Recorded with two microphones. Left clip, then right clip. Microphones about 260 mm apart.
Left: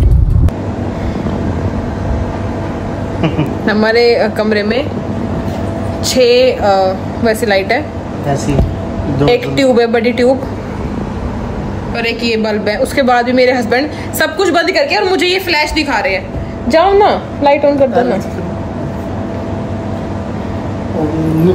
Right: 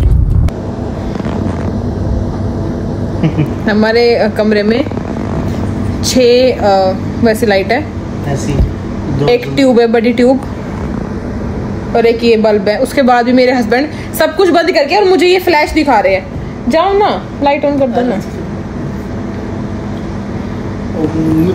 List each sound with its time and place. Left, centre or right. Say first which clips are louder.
3.6 s a woman's voice: even; centre
6.2 s a woman's voice: right 1 dB; centre
9.3 s a woman's voice: right 2 dB; centre
11.9 s a woman's voice: right 7 dB; centre
12.6 s a woman's voice: right 2 dB; centre; by 16.1 s right
16.7 s a woman's voice: left 2 dB; centre